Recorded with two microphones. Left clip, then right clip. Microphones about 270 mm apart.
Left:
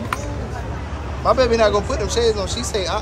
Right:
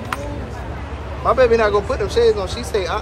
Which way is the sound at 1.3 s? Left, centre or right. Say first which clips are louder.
Right 1 dB; centre.